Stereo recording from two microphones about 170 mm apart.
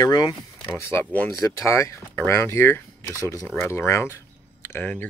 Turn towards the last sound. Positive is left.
turn(degrees=10)  # may be behind; listen again after turning